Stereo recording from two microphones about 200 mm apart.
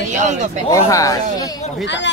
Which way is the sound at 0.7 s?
15° left (ahead or behind).